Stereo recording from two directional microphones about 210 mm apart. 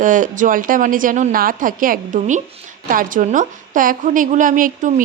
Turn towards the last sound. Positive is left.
turn(degrees=-40)  # may be behind; listen again after turning